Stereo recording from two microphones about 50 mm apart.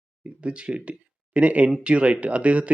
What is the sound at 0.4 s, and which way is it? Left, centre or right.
Speech, right.